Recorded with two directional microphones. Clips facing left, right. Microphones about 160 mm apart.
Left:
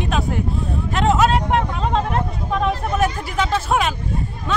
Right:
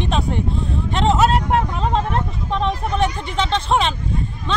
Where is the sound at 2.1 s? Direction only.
5° left (ahead or behind).